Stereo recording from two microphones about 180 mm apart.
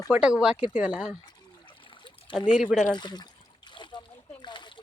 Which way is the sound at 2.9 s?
25° left (ahead or behind).